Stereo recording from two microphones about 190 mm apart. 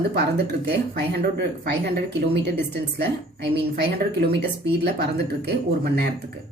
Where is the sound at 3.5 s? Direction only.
60° right (ahead or behind).